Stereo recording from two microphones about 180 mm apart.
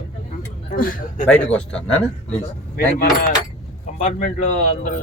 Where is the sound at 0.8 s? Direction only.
50° left (ahead or behind).